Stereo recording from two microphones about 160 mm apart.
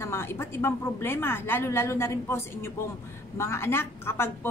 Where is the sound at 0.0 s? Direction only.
15° left (ahead or behind).